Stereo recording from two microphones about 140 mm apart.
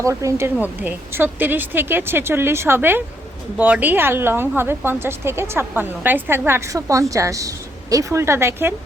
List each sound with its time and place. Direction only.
0.0 s a woman's voice: 20° right (ahead or behind)